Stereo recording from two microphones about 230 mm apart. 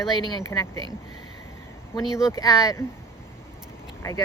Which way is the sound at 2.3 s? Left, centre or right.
Centre.